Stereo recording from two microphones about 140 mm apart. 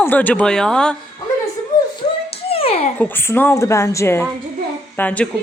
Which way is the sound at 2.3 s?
45° left (ahead or behind).